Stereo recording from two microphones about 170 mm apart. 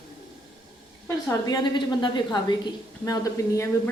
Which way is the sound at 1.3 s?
20° left (ahead or behind).